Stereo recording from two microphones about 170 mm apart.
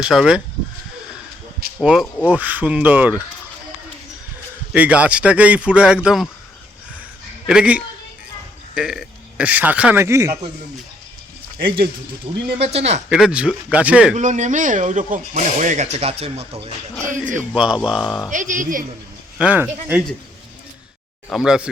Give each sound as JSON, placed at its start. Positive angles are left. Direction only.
{"t": 0.0, "sound": "speech", "side_deg": -5}
{"t": 1.8, "sound": "speech", "side_deg": -5}
{"t": 4.7, "sound": "speech", "side_deg": -5}
{"t": 7.4, "sound": "a man's voice", "side_deg": -5}
{"t": 12.5, "sound": "speech", "side_deg": -35}
{"t": 13.1, "sound": "speech", "side_deg": -5}
{"t": 14.2, "sound": "speech", "side_deg": -45}
{"t": 17.1, "sound": "speech", "side_deg": -50}
{"t": 17.5, "sound": "speech", "side_deg": -5}
{"t": 18.3, "sound": "speech", "side_deg": -50}
{"t": 19.4, "sound": "speech", "side_deg": -10}
{"t": 21.2, "sound": "speech", "side_deg": 0}